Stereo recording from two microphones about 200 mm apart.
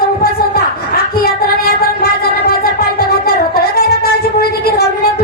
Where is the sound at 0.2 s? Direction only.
50° left (ahead or behind).